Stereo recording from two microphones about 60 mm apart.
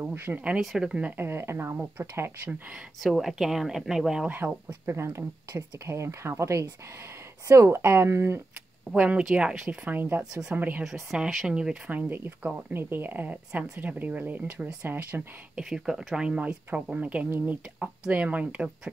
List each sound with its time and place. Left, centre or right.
0.0 s speech: right
0.6 s speech: centre
1.1 s speech: right
3.0 s speech: centre
4.8 s speech: right
8.9 s a woman's voice: centre
9.8 s a woman's voice: right
10.8 s speech: centre
12.1 s a woman's voice: right
15.5 s a woman's voice: centre